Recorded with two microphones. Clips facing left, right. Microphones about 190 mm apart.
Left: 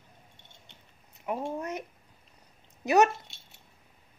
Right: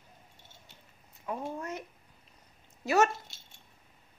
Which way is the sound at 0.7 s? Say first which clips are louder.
Left 1 dB; centre (ahead or behind).